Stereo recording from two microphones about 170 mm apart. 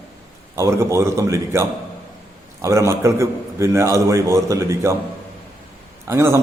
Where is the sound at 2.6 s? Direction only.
15° right (ahead or behind).